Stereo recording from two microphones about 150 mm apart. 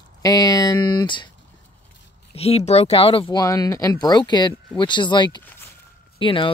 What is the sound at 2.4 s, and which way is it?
Speech, 45° left (ahead or behind).